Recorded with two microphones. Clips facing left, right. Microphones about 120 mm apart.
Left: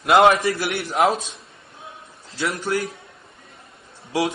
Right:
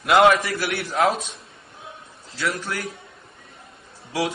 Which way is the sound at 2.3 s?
25° left (ahead or behind).